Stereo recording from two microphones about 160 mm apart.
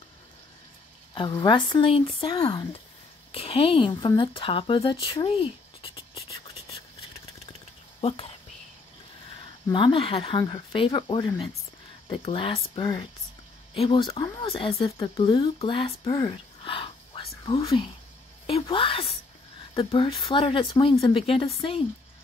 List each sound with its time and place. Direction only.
1.1 s speech: 25° left (ahead or behind)
2.3 s speech: 25° left (ahead or behind)
3.3 s speech: 35° left (ahead or behind)
8.0 s speech: 40° left (ahead or behind)
9.7 s speech: 30° left (ahead or behind)
16.1 s whispering: 25° left (ahead or behind)
18.5 s speech: 35° left (ahead or behind)